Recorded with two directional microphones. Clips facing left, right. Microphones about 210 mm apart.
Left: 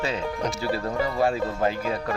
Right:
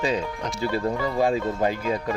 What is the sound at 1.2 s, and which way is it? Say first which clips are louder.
Speech: right 2 dB; 15° right (ahead or behind).